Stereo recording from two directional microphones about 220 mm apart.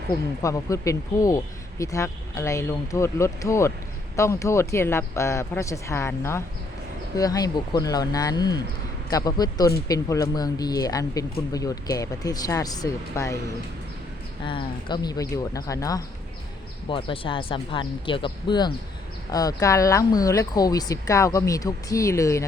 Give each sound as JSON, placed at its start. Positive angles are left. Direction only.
{"t": 0.4, "sound": "speech", "side_deg": 15}
{"t": 14.4, "sound": "speech", "side_deg": 20}